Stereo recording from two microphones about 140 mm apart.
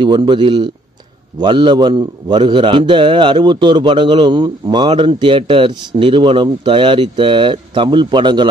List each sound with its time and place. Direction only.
0.0 s a man's voice: 35° right (ahead or behind)